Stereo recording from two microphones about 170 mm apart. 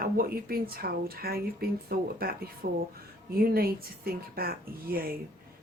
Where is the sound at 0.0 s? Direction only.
60° right (ahead or behind).